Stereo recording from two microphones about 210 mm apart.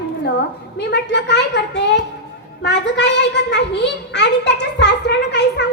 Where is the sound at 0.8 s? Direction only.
55° left (ahead or behind).